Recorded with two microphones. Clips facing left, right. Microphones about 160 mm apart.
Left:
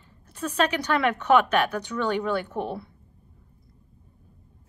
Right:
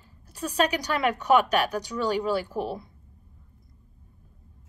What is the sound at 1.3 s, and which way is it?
Speech, 10° right (ahead or behind).